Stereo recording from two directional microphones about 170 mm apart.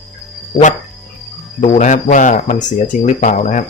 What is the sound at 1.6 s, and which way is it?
Speech, 45° left (ahead or behind).